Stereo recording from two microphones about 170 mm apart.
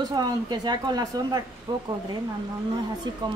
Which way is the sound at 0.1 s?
25° right (ahead or behind).